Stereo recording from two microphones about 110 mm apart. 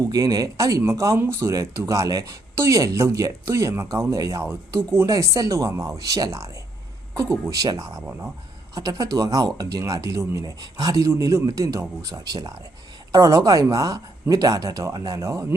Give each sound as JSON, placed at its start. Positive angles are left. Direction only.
{"t": 0.1, "sound": "speech", "side_deg": -35}
{"t": 7.5, "sound": "speech", "side_deg": -35}